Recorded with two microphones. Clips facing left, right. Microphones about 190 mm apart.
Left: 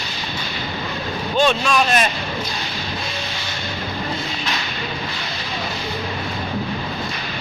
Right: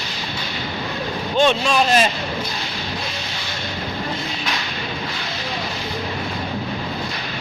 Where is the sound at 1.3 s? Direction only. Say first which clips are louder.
Right 1 dB; 20° right (ahead or behind).